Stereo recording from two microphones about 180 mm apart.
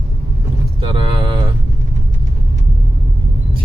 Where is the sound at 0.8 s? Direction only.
25° right (ahead or behind).